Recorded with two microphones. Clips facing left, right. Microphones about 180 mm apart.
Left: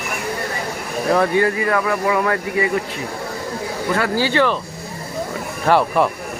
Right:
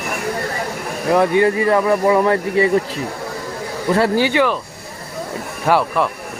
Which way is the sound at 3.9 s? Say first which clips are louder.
Right 5 dB; 30° right (ahead or behind).